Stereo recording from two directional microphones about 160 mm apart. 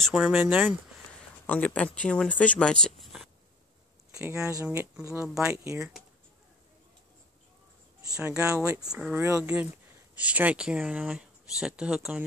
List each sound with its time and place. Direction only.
0.0 s speech: 5° right (ahead or behind)
1.5 s speech: 10° left (ahead or behind)
4.1 s a sound: 15° right (ahead or behind)
5.0 s speech: 15° right (ahead or behind)
8.2 s speech: 10° right (ahead or behind)
8.9 s speech: 5° right (ahead or behind)